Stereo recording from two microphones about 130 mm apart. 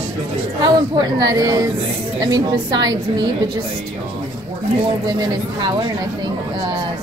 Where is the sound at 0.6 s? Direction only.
30° right (ahead or behind).